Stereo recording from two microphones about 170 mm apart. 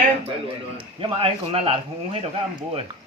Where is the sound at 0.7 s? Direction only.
30° right (ahead or behind).